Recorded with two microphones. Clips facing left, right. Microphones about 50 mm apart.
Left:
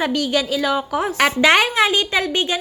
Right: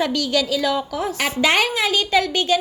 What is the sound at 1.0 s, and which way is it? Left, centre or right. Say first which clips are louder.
Speech: left 4 dB; left.